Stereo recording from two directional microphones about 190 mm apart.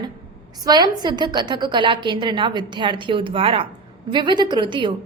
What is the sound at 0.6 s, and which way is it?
A woman's voice, 20° right (ahead or behind).